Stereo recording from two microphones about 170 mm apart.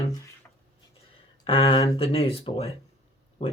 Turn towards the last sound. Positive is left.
turn(degrees=35)  # may be behind; listen again after turning